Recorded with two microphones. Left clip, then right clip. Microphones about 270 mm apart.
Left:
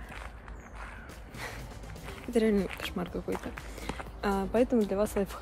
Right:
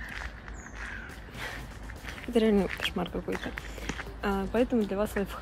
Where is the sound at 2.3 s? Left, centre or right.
Centre.